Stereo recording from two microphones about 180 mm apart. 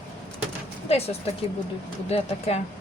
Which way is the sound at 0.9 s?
35° left (ahead or behind).